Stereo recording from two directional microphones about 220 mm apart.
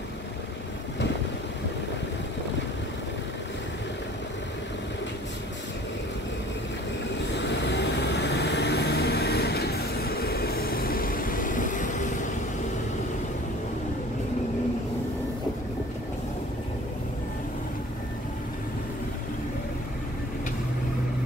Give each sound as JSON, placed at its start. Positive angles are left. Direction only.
{"t": 7.3, "sound": "vehicle", "side_deg": 50}